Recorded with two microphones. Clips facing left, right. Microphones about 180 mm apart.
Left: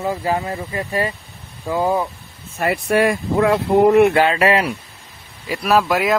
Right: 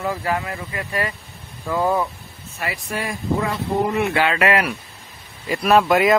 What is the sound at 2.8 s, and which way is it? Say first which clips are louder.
Speech: left 9 dB; 70° left (ahead or behind).